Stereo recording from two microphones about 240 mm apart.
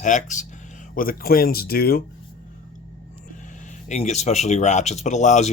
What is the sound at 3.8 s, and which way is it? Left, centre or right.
Speech, left.